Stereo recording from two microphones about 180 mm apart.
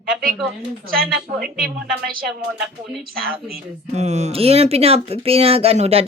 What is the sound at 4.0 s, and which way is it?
Speech, 40° right (ahead or behind).